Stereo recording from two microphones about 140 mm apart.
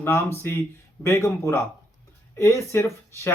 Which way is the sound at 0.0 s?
20° left (ahead or behind).